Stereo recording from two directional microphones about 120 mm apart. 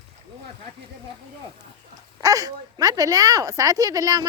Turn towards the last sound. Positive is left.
turn(degrees=-30)  # may be behind; listen again after turning